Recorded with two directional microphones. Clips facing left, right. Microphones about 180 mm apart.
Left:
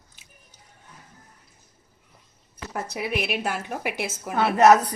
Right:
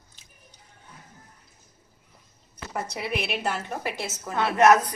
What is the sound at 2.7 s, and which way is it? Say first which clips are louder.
A woman's voice: left 2 dB; 5° left (ahead or behind).